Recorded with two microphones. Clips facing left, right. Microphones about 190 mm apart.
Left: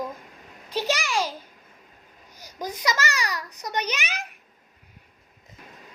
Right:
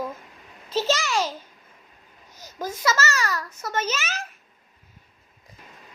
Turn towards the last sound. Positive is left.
turn(degrees=15)  # may be behind; listen again after turning